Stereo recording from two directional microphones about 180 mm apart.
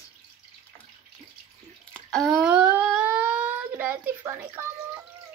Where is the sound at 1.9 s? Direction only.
5° left (ahead or behind); by 5.0 s 15° right (ahead or behind).